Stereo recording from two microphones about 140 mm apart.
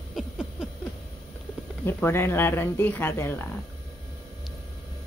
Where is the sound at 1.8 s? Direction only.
15° left (ahead or behind).